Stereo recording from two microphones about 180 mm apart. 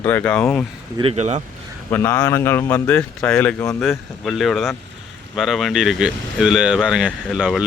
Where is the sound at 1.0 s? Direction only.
35° right (ahead or behind).